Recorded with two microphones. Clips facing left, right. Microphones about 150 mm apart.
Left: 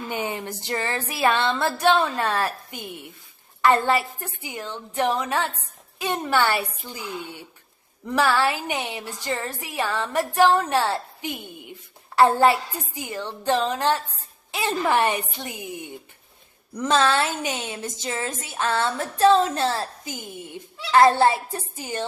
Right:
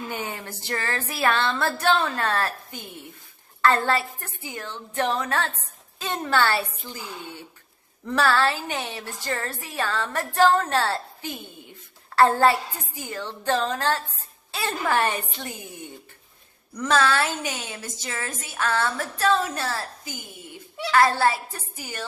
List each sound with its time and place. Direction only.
0.1 s a woman's voice: 20° left (ahead or behind)